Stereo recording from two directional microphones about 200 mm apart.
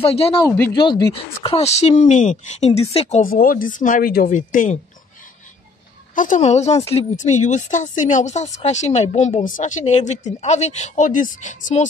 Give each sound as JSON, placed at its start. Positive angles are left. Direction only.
{"t": 0.0, "sound": "speech", "side_deg": 30}
{"t": 0.5, "sound": "speech", "side_deg": 10}
{"t": 6.1, "sound": "speech", "side_deg": 40}